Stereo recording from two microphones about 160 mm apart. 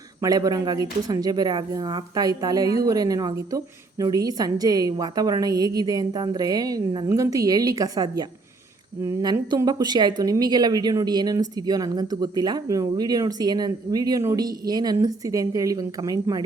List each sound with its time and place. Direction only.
0.2 s speech: 25° right (ahead or behind)